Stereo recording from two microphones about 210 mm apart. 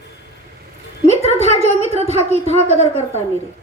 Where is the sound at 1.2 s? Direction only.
30° left (ahead or behind).